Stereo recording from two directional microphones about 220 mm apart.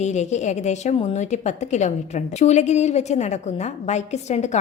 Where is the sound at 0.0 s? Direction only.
30° left (ahead or behind).